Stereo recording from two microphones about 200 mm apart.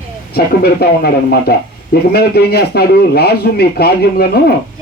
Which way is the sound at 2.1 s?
50° left (ahead or behind).